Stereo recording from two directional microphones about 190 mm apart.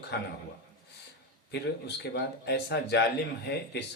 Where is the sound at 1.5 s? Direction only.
60° left (ahead or behind).